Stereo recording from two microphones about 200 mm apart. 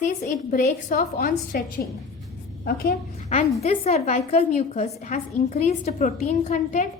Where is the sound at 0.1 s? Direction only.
40° left (ahead or behind).